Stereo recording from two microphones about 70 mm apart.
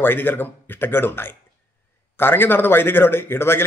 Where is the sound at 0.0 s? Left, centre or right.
Left.